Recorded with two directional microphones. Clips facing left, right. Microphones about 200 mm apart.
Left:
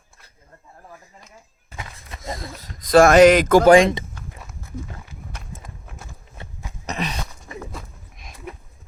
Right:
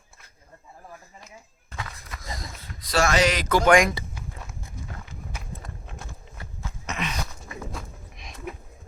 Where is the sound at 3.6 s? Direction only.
30° left (ahead or behind).